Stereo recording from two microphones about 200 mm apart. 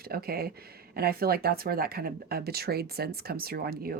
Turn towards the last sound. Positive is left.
turn(degrees=-50)  # may be behind; listen again after turning